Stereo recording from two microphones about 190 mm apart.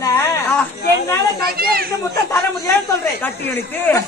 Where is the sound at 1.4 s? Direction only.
50° right (ahead or behind).